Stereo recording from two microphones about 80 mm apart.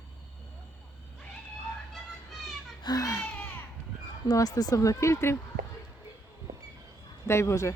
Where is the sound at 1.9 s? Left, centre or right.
Centre.